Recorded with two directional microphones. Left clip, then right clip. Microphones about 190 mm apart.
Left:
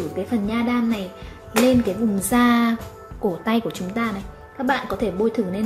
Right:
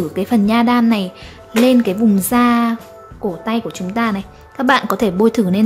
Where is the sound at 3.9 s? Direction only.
20° right (ahead or behind).